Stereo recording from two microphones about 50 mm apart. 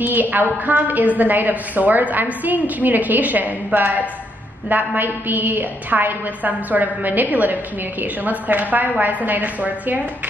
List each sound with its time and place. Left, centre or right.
0.0 s a woman's voice: right